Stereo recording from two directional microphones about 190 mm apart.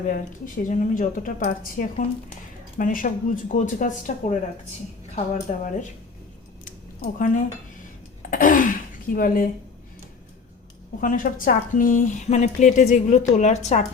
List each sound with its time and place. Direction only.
0.1 s speech: 45° left (ahead or behind)
6.7 s a sound: 45° left (ahead or behind)
8.3 s speech: 45° left (ahead or behind)
11.0 s speech: 45° left (ahead or behind)